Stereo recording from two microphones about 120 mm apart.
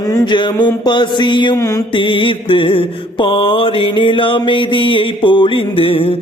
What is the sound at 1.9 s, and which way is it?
Mantra, 45° left (ahead or behind).